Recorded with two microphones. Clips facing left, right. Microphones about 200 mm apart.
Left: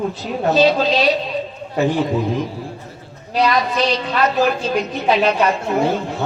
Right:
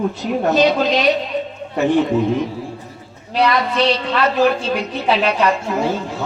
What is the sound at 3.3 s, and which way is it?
Speech, 30° right (ahead or behind).